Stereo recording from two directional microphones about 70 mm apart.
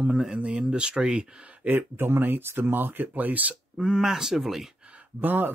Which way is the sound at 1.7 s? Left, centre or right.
Right.